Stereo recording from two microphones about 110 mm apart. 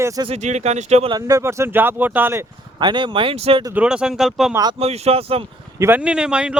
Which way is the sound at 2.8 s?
45° right (ahead or behind).